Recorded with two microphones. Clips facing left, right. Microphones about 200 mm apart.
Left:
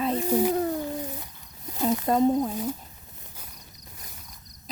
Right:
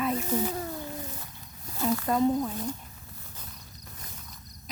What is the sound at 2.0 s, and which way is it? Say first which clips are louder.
Speech: left 4 dB; 35° left (ahead or behind).